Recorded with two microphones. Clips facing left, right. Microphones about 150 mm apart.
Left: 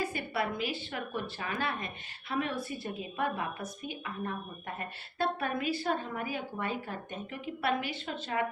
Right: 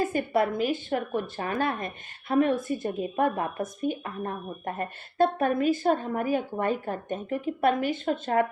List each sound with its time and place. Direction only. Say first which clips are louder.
0.0 s a woman's voice: right 8 dB; 45° right (ahead or behind)